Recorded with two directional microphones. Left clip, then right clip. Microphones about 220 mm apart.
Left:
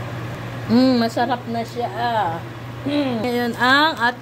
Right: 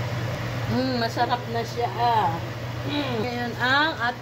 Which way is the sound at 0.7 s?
50° left (ahead or behind).